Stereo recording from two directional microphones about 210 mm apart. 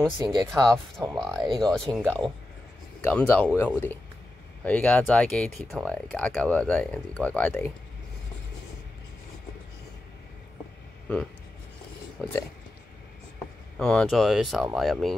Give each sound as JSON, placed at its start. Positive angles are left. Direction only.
{"t": 0.2, "sound": "speech", "side_deg": -20}
{"t": 0.9, "sound": "speech", "side_deg": 0}
{"t": 12.2, "sound": "speech", "side_deg": 15}
{"t": 13.7, "sound": "speech", "side_deg": 5}